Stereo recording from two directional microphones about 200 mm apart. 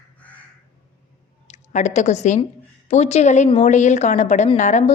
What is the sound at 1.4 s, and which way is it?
A woman's voice, 35° left (ahead or behind).